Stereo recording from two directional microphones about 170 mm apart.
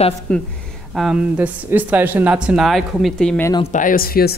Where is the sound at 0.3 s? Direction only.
5° left (ahead or behind).